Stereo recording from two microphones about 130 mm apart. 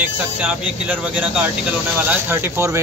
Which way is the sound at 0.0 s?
10° right (ahead or behind).